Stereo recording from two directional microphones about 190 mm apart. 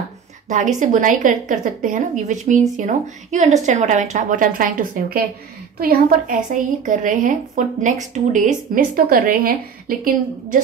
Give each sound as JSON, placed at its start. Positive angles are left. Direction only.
{"t": 0.5, "sound": "a woman's voice", "side_deg": -40}